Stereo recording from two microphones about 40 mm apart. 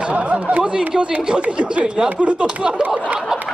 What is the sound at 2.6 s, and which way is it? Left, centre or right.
Speech, right.